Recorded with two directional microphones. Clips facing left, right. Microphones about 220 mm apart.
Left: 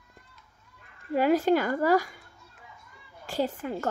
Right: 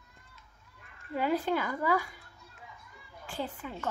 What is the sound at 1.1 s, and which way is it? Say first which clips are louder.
Speech: left 7 dB; 90° left.